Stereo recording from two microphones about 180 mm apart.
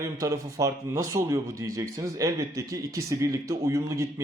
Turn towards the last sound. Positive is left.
turn(degrees=-15)  # may be behind; listen again after turning